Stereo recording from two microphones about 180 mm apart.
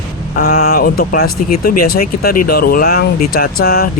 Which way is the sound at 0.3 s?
55° left (ahead or behind).